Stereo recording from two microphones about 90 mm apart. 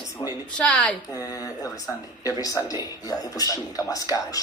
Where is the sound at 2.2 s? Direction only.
40° left (ahead or behind).